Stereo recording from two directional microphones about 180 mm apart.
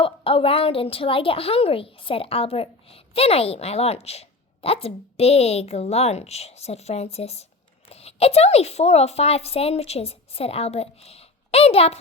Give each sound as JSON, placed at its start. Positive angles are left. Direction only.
{"t": 0.0, "sound": "a woman's voice", "side_deg": 30}